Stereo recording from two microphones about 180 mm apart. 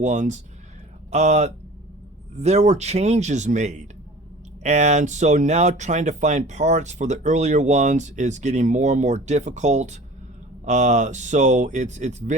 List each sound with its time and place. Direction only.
0.0 s speech: 40° right (ahead or behind)